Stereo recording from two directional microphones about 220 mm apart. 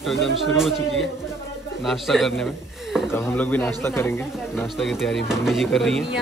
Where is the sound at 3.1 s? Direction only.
10° left (ahead or behind).